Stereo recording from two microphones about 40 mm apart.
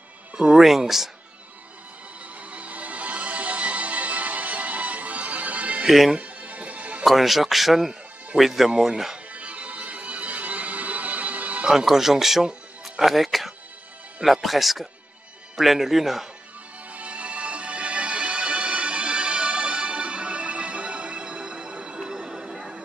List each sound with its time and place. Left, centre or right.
0.6 s speech: centre
2.5 s music: right
5.9 s speech: centre
6.1 s music: right
7.1 s speech: centre
9.3 s music: right
11.7 s speech: centre
16.9 s music: right
22.0 s a sound: centre